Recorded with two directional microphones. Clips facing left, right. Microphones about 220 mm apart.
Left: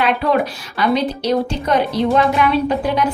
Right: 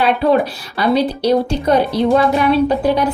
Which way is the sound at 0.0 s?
30° right (ahead or behind).